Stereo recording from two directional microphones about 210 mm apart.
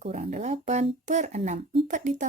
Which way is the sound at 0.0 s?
30° right (ahead or behind).